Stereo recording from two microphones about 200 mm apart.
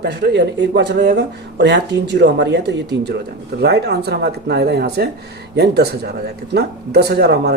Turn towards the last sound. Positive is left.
turn(degrees=-55)  # may be behind; listen again after turning